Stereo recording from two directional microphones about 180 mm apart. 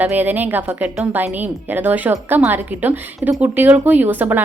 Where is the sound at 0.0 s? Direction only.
10° right (ahead or behind).